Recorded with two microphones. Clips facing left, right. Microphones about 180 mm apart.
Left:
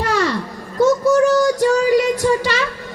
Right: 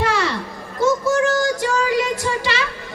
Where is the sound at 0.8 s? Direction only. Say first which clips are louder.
Left 4 dB; 40° left (ahead or behind).